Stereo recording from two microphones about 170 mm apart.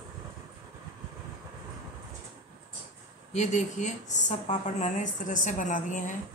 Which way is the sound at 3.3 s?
45° left (ahead or behind).